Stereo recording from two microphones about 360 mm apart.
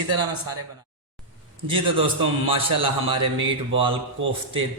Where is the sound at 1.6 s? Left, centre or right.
Centre.